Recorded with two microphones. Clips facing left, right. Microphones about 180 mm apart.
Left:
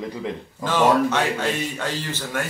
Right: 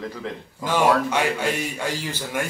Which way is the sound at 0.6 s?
10° right (ahead or behind).